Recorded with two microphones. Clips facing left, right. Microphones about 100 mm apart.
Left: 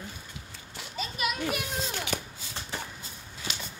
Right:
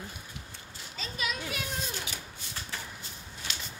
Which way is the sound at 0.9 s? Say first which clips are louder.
Left 4 dB; 10° left (ahead or behind).